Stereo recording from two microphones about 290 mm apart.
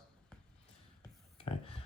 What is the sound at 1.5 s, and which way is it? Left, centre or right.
Speech, left.